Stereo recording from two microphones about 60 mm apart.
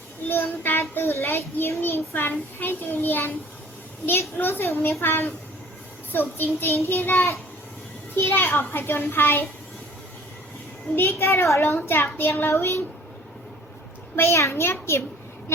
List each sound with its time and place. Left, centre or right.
0.3 s a child's voice: left
4.4 s a child's voice: left
6.1 s a child's voice: left
10.9 s a child's voice: left
14.2 s a child's voice: left